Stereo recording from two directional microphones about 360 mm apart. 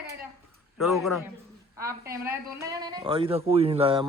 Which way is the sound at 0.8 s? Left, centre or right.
Centre.